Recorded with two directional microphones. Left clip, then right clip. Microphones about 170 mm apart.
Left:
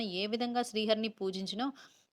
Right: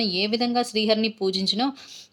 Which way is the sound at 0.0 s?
35° left (ahead or behind).